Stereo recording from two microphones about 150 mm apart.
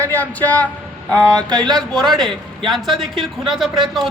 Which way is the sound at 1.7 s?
5° left (ahead or behind).